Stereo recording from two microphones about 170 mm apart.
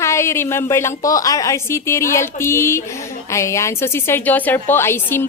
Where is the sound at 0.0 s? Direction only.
15° left (ahead or behind).